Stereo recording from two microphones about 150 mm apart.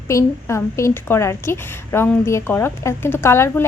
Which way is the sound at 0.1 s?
20° left (ahead or behind).